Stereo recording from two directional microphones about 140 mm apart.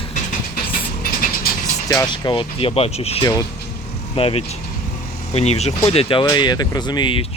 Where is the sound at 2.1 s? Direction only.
35° left (ahead or behind).